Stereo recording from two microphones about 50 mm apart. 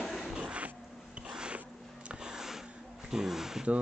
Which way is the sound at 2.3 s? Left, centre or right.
Centre.